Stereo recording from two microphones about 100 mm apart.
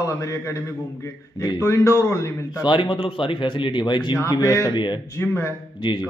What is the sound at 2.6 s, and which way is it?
A man's voice, 55° left (ahead or behind).